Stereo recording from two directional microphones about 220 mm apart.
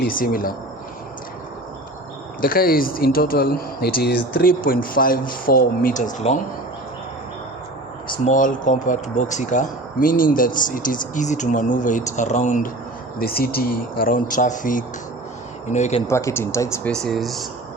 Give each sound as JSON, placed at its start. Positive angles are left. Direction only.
{"t": 0.0, "sound": "speech", "side_deg": 40}
{"t": 2.4, "sound": "speech", "side_deg": 40}
{"t": 8.1, "sound": "speech", "side_deg": 35}
{"t": 16.0, "sound": "speech", "side_deg": 10}